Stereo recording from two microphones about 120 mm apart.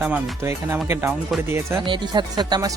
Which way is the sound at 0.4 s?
25° right (ahead or behind).